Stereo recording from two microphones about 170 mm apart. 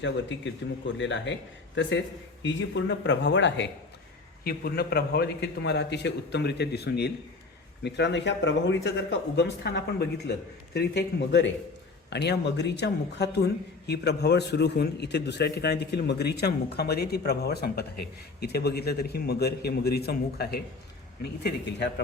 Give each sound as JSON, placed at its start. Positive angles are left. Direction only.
{"t": 0.0, "sound": "speech", "side_deg": 90}
{"t": 4.4, "sound": "speech", "side_deg": 65}
{"t": 7.9, "sound": "speech", "side_deg": 90}
{"t": 12.1, "sound": "speech", "side_deg": 75}
{"t": 21.4, "sound": "speech", "side_deg": 90}